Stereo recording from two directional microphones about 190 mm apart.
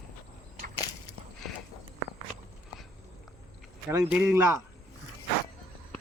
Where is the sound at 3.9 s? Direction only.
10° right (ahead or behind).